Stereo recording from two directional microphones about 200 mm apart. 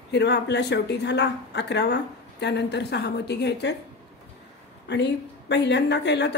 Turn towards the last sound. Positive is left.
turn(degrees=60)  # may be behind; listen again after turning